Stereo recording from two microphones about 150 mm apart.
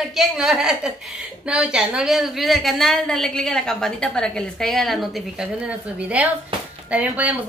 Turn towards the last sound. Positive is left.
turn(degrees=-10)  # may be behind; listen again after turning